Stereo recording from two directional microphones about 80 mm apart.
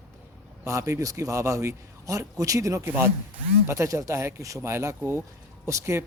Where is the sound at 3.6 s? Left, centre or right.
Right.